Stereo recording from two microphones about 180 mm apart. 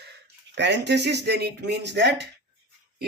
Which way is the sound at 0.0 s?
70° right (ahead or behind).